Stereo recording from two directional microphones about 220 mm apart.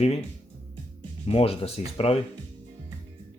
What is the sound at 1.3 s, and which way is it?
Speech, 25° left (ahead or behind).